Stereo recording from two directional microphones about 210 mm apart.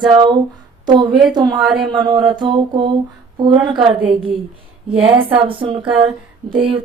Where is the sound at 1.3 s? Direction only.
20° right (ahead or behind).